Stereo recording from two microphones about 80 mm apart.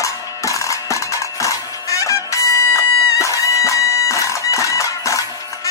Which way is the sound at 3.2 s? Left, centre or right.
Left.